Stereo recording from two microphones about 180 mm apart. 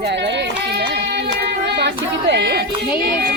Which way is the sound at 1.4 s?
70° right (ahead or behind).